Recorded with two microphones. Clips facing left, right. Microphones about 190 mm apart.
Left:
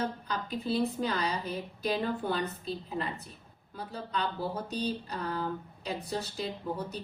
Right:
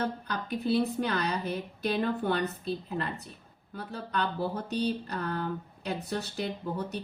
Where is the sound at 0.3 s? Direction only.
65° right (ahead or behind).